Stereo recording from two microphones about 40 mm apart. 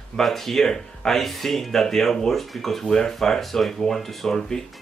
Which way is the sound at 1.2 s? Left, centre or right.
Centre.